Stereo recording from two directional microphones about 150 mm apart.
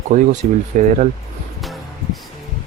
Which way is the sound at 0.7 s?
60° right (ahead or behind).